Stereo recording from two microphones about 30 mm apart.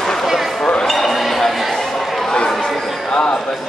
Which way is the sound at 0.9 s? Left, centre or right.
Centre.